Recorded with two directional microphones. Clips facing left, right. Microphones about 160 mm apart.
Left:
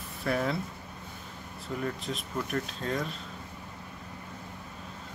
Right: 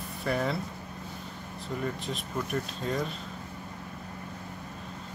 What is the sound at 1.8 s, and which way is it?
Speech, centre (ahead or behind).